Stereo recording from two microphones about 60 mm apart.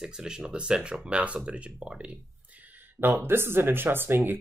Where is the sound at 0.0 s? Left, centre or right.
Centre.